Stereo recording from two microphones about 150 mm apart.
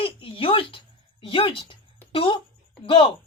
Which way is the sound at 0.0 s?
35° left (ahead or behind).